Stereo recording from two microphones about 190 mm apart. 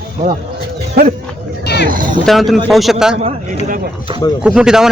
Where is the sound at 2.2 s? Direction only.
Centre (ahead or behind).